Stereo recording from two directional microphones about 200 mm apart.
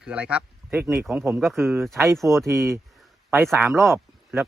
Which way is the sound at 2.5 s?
15° right (ahead or behind).